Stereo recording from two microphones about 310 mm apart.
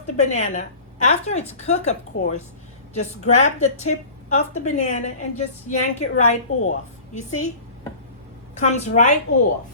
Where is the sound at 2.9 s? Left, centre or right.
Left.